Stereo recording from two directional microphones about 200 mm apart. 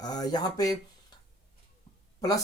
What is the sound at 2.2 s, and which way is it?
Speech, 20° left (ahead or behind).